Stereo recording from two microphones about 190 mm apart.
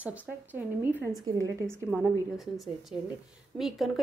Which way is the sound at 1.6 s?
Centre (ahead or behind).